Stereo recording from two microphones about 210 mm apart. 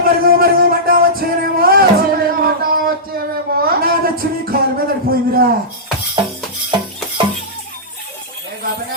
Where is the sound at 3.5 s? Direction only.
45° right (ahead or behind).